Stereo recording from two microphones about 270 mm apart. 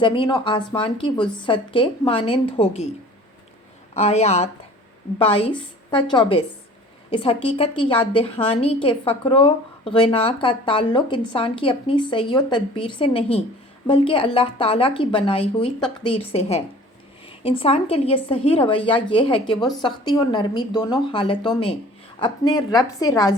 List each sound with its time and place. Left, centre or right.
0.0 s a woman's voice: centre
3.9 s a woman's voice: left